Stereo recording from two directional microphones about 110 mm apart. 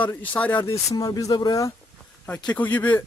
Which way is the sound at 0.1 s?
15° left (ahead or behind).